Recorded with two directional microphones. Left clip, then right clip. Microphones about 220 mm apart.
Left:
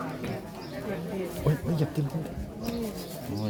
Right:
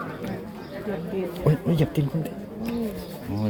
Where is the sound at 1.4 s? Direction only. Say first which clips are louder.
Right 7 dB; 35° right (ahead or behind).